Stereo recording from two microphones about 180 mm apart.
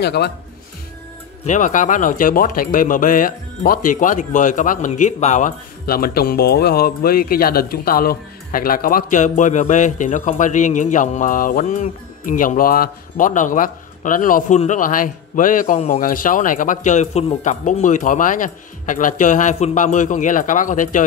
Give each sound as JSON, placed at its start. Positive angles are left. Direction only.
{"t": 0.0, "sound": "speech", "side_deg": 65}
{"t": 1.4, "sound": "speech", "side_deg": 45}